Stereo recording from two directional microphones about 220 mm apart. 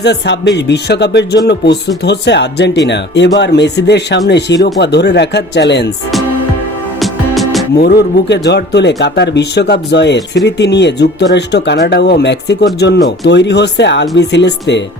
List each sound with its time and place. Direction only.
0.0 s speech: 50° left (ahead or behind)
7.0 s music: centre (ahead or behind)
7.8 s speech: 45° left (ahead or behind)